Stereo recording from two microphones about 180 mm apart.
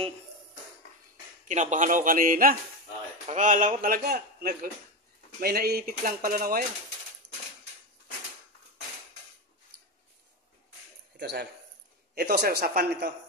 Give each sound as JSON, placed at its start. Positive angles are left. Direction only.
{"t": 1.5, "sound": "a man's voice", "side_deg": -45}
{"t": 11.1, "sound": "speech", "side_deg": -65}